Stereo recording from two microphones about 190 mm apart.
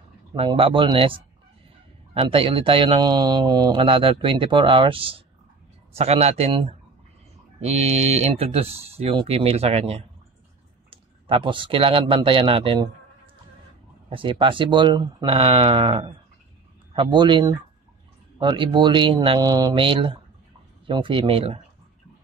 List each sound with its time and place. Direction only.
0.3 s speech: 25° right (ahead or behind)
14.0 s speech: 25° right (ahead or behind)